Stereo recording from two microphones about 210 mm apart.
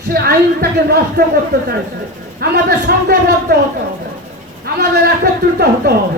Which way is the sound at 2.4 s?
50° right (ahead or behind).